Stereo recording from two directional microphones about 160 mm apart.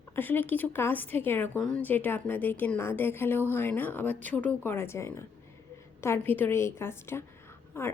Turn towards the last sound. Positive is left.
turn(degrees=15)  # may be behind; listen again after turning